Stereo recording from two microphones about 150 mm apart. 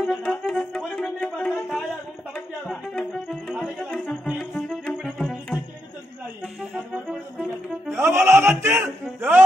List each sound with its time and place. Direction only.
0.0 s music: centre (ahead or behind)
7.9 s music: 15° right (ahead or behind)
8.3 s a man's voice: 15° right (ahead or behind)
9.0 s a sound: 10° right (ahead or behind)